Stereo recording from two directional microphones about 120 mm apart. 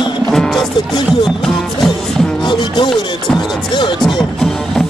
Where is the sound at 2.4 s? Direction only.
40° left (ahead or behind).